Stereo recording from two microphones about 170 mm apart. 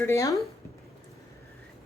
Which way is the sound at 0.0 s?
15° left (ahead or behind).